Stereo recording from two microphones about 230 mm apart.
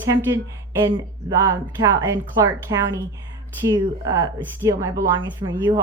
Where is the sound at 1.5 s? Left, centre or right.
Centre.